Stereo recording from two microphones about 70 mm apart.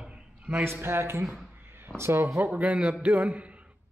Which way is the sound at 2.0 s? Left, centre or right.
Right.